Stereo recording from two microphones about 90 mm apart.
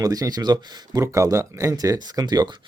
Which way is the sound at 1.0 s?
35° right (ahead or behind).